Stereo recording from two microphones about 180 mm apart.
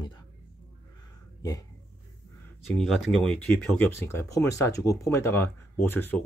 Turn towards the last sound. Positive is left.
turn(degrees=10)  # may be behind; listen again after turning